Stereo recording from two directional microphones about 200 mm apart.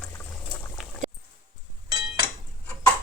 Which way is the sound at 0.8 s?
Centre (ahead or behind).